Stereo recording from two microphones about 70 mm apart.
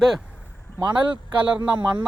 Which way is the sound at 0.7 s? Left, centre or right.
Right.